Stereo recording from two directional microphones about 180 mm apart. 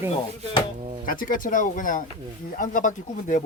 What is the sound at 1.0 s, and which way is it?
Speech, 50° left (ahead or behind).